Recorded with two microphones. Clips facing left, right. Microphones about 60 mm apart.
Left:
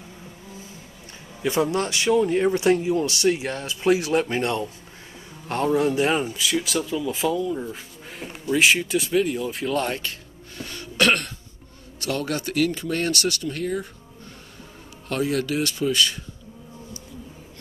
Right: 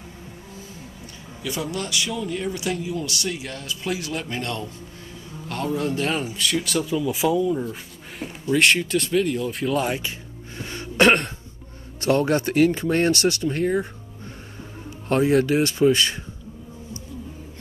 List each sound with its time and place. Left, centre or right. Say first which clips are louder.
1.4 s speech: left 6 dB; left
5.9 s speech: left 3 dB; centre
6.2 s speech: even; centre
10.6 s throat clearing: right 4 dB; right
12.0 s speech: right 7 dB; right
15.0 s speech: right 6 dB; right